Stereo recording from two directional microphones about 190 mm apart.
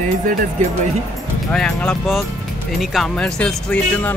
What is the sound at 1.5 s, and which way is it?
Speech, 5° left (ahead or behind).